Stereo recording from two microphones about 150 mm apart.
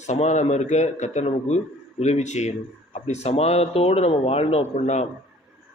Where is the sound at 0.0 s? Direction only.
50° left (ahead or behind).